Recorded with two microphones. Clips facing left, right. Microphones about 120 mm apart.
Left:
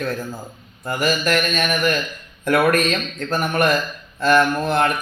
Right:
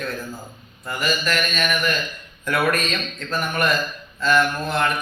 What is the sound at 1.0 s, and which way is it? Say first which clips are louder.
A man's voice: left 4 dB; 50° left (ahead or behind).